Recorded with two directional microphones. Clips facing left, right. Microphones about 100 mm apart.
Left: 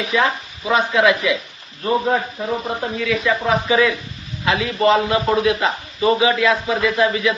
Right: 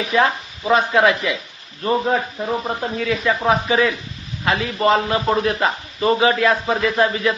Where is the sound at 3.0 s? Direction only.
35° right (ahead or behind).